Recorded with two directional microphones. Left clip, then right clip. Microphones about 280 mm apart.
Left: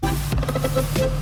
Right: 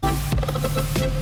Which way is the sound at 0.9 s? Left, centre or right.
Centre.